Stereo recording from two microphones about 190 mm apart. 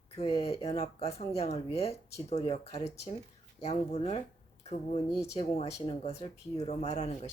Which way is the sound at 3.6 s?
35° left (ahead or behind).